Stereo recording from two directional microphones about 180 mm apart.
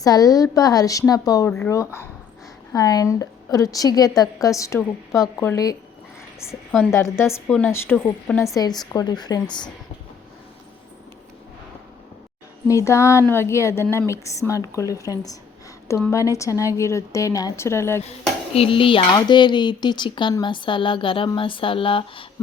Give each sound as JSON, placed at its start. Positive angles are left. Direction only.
{"t": 0.0, "sound": "a woman's voice", "side_deg": 20}
{"t": 6.9, "sound": "a woman's voice", "side_deg": 15}
{"t": 12.6, "sound": "a woman's voice", "side_deg": 15}
{"t": 18.5, "sound": "speech", "side_deg": 30}